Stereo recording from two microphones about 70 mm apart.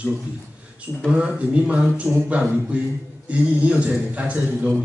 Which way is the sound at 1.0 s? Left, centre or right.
Centre.